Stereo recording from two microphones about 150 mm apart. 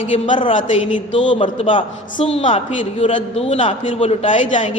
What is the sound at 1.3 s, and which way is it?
A man's voice, 35° left (ahead or behind).